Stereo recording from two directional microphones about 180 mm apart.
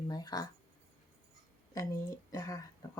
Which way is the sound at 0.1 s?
20° left (ahead or behind).